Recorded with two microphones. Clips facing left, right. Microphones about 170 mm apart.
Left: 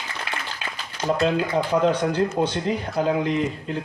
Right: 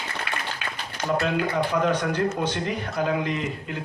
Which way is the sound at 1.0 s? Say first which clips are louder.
Left 3 dB; 25° left (ahead or behind).